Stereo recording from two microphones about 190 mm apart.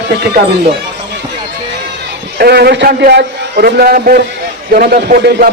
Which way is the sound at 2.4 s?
55° right (ahead or behind).